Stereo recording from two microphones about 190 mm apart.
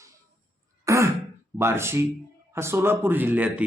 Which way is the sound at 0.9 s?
15° right (ahead or behind).